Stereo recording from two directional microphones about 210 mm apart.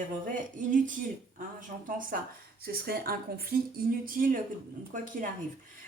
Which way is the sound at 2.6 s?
45° right (ahead or behind).